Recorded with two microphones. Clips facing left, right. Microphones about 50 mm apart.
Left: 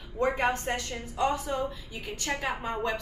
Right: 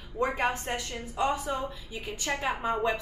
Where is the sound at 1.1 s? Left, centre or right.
Centre.